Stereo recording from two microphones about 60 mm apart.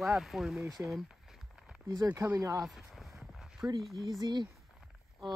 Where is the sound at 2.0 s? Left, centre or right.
Right.